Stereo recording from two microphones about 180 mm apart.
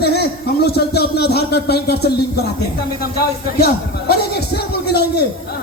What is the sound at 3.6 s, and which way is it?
A man's voice, 60° left (ahead or behind).